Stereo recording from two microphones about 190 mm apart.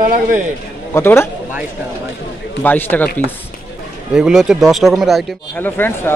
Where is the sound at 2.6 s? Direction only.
10° left (ahead or behind).